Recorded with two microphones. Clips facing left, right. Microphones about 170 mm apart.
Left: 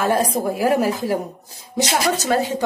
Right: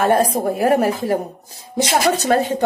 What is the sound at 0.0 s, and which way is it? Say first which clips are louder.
A woman's voice: right 3 dB; 60° right (ahead or behind).